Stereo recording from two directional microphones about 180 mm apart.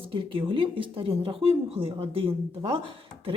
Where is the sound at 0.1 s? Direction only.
30° right (ahead or behind).